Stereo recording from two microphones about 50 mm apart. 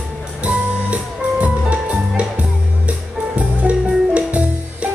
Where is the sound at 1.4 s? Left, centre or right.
Right.